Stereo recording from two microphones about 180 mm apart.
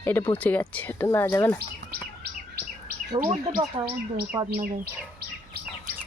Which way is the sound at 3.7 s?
25° right (ahead or behind).